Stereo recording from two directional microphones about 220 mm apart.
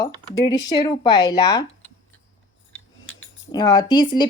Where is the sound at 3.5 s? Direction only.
20° left (ahead or behind).